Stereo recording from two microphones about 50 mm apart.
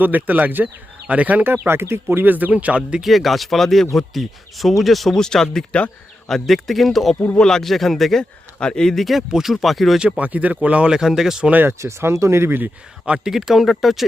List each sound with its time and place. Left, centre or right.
0.0 s speech: right
1.5 s speech: right
2.2 s speech: right
3.0 s speech: centre
7.3 s speech: centre
8.2 s speech: centre
9.0 s speech: centre
10.2 s speech: right; by 11.4 s centre
11.8 s speech: right
13.1 s speech: centre